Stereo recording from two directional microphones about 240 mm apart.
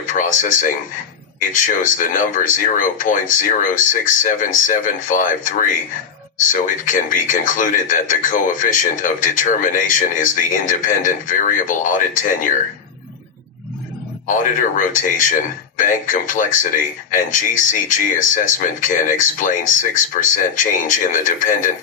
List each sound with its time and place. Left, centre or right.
0.0 s speech: left
14.8 s speech: left